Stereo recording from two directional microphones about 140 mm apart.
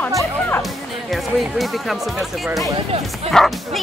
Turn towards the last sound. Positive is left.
turn(degrees=0)  # may be behind; listen again after turning